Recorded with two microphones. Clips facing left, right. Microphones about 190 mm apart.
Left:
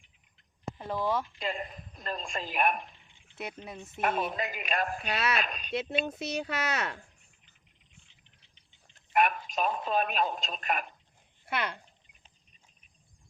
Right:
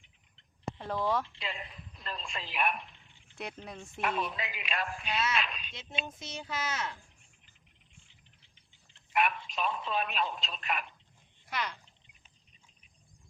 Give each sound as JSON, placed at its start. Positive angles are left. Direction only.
{"t": 0.8, "sound": "speech", "side_deg": 0}
{"t": 1.4, "sound": "speech", "side_deg": 45}
{"t": 4.0, "sound": "speech", "side_deg": 45}
{"t": 5.7, "sound": "speech", "side_deg": 65}
{"t": 9.1, "sound": "speech", "side_deg": 45}
{"t": 11.4, "sound": "speech", "side_deg": 60}